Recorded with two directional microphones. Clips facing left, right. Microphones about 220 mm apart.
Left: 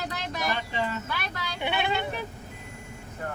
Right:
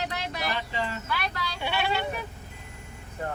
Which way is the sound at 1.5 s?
20° left (ahead or behind).